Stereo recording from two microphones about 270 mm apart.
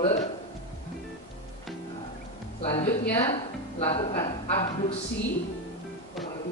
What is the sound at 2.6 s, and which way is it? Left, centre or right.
A woman's voice, left.